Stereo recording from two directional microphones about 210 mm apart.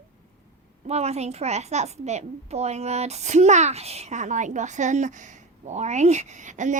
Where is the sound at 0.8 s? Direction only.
30° right (ahead or behind).